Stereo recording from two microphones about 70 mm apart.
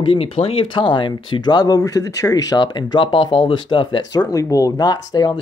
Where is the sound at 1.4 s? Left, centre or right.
Left.